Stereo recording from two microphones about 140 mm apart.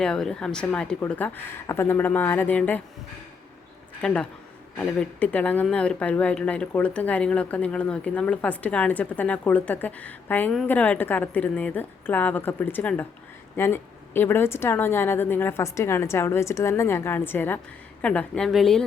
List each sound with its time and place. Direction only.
0.0 s speech: 5° left (ahead or behind)
4.0 s a woman's voice: 5° left (ahead or behind)